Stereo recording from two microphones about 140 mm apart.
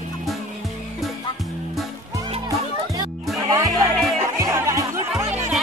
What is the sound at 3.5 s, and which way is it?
Music, 25° right (ahead or behind).